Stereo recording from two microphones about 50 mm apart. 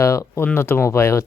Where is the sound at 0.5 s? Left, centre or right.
Left.